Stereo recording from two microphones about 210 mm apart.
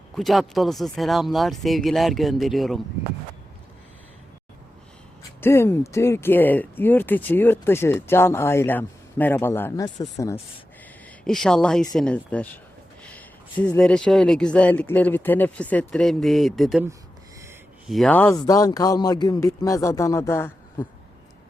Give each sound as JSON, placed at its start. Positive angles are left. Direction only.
{"t": 0.2, "sound": "speech", "side_deg": 0}
{"t": 5.4, "sound": "speech", "side_deg": 10}
{"t": 11.3, "sound": "speech", "side_deg": 0}
{"t": 13.0, "sound": "a sound", "side_deg": 5}
{"t": 13.7, "sound": "speech", "side_deg": 5}
{"t": 17.8, "sound": "speech", "side_deg": 0}